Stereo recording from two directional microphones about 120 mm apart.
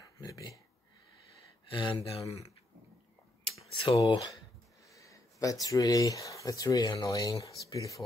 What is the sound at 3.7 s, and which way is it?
Speech, 45° left (ahead or behind).